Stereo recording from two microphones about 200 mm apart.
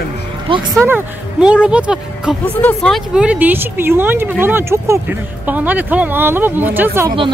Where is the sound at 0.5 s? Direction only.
25° right (ahead or behind).